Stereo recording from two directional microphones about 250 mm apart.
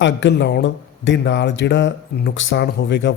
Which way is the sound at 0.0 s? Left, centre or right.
Left.